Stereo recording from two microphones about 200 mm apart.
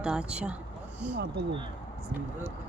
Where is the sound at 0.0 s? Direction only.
5° right (ahead or behind).